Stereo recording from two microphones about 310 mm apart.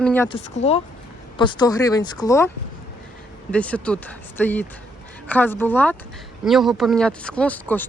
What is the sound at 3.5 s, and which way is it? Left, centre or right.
Speech, centre.